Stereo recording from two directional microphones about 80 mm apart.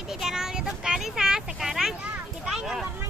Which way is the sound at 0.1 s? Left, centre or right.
Centre.